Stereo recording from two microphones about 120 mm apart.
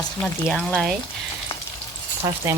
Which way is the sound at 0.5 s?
5° left (ahead or behind).